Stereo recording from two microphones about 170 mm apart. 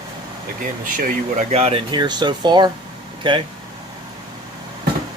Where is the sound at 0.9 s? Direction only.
50° right (ahead or behind); by 3.4 s 30° right (ahead or behind).